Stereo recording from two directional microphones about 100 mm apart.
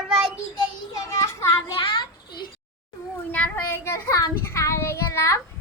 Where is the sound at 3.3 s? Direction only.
15° left (ahead or behind).